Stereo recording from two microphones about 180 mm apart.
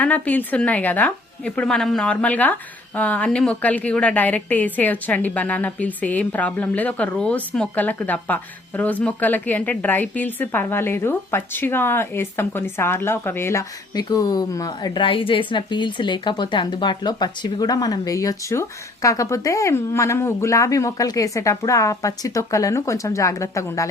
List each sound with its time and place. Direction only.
0.0 s a woman's voice: 10° left (ahead or behind)